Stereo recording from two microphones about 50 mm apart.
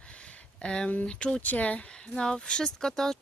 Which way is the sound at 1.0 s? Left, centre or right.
Centre.